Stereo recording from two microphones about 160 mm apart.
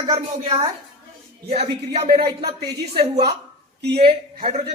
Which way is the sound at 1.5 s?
40° right (ahead or behind).